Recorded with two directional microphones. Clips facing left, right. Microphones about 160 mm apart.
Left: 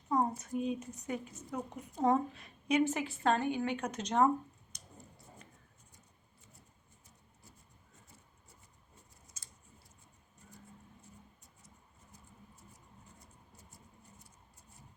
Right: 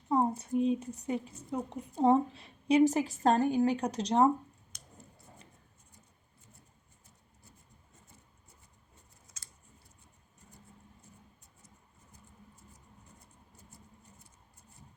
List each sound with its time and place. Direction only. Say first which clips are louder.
0.1 s a woman's voice: right 4 dB; 30° right (ahead or behind)